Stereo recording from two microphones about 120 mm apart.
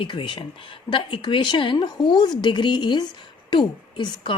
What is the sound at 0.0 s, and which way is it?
A woman's voice, 45° left (ahead or behind).